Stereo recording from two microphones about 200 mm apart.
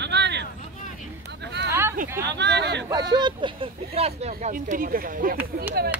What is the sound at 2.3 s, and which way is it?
Speech, 60° right (ahead or behind).